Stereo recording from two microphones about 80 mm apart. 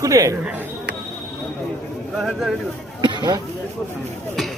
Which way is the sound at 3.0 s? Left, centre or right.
Right.